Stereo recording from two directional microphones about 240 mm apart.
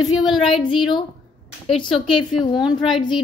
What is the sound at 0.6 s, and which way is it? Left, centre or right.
A woman's voice, centre.